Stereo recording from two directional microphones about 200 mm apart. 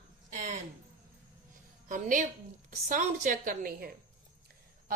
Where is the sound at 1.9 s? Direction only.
40° right (ahead or behind).